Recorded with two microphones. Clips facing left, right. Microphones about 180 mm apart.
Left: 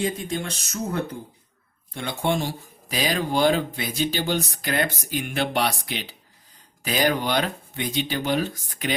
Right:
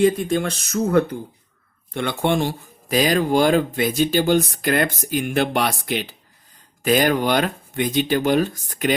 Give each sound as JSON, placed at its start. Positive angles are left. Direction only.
{"t": 0.0, "sound": "speech", "side_deg": -60}
{"t": 2.9, "sound": "speech", "side_deg": -45}